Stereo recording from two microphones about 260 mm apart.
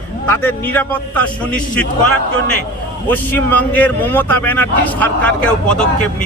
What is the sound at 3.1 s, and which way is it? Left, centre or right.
Speech, centre.